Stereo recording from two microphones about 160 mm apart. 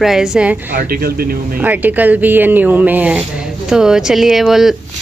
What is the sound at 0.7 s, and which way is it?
Speech, 70° right (ahead or behind).